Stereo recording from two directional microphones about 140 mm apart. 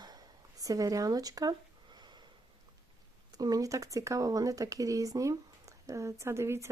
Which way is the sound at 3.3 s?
25° right (ahead or behind).